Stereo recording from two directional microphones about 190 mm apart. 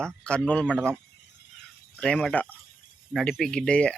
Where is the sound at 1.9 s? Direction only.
5° left (ahead or behind).